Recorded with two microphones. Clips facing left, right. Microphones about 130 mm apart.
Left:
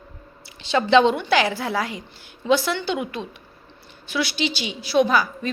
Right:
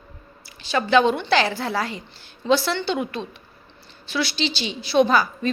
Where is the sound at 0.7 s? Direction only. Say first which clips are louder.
Left 2 dB; 20° left (ahead or behind).